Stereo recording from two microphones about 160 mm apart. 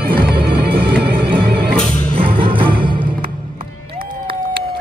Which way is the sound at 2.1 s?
35° right (ahead or behind).